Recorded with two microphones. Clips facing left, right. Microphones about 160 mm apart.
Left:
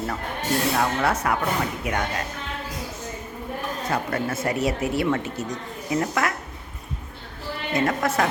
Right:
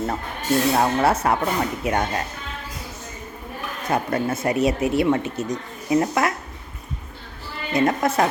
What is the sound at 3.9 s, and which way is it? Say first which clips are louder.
Speech: right 5 dB; 20° right (ahead or behind).